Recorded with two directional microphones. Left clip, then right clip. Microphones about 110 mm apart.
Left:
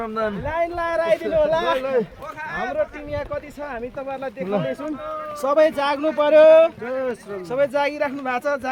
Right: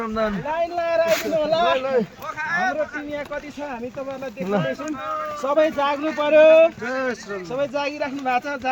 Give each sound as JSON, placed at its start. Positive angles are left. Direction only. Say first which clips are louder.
{"t": 0.0, "sound": "speech", "louder": "right 1 dB", "side_deg": -5}
{"t": 0.5, "sound": "speech", "louder": "right 1 dB", "side_deg": 30}
{"t": 1.4, "sound": "speech", "louder": "even", "side_deg": 20}
{"t": 1.8, "sound": "a man's voice", "louder": "even", "side_deg": -15}
{"t": 2.5, "sound": "speech", "louder": "right 5 dB", "side_deg": 5}
{"t": 4.6, "sound": "speech", "louder": "right 1 dB", "side_deg": 15}
{"t": 5.4, "sound": "speech", "louder": "left 2 dB", "side_deg": 30}
{"t": 6.8, "sound": "speech", "louder": "even", "side_deg": 0}
{"t": 7.5, "sound": "speech", "louder": "left 4 dB", "side_deg": 45}